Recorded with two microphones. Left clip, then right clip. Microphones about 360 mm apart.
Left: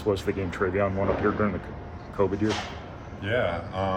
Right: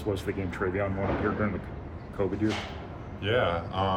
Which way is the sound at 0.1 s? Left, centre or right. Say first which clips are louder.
Left 5 dB; left.